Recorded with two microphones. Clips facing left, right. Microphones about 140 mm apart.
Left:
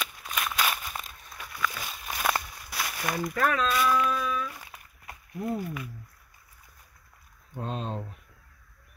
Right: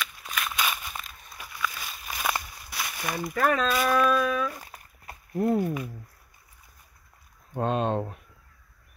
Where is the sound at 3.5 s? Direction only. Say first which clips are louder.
Right 1 dB; 40° right (ahead or behind).